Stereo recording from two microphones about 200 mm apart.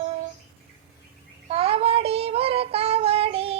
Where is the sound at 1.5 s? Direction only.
30° right (ahead or behind).